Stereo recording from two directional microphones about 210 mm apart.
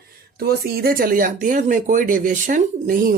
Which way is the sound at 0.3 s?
45° right (ahead or behind).